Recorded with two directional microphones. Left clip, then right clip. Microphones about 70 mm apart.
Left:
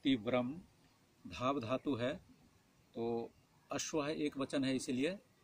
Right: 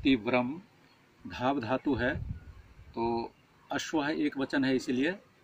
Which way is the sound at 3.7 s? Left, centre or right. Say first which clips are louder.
Right 7 dB; left.